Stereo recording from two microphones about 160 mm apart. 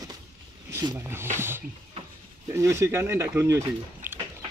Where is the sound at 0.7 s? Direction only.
15° right (ahead or behind).